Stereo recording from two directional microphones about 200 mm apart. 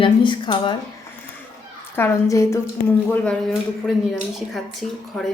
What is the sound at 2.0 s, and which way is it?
Speech, 15° left (ahead or behind).